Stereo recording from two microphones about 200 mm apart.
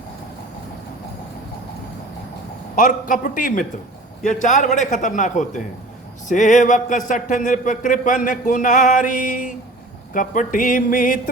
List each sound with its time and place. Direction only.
2.7 s speech: 40° left (ahead or behind)